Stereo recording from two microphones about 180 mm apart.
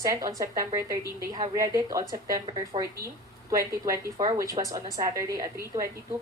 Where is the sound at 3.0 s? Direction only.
20° right (ahead or behind).